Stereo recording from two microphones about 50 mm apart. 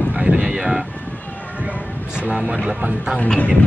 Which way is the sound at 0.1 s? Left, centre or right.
Right.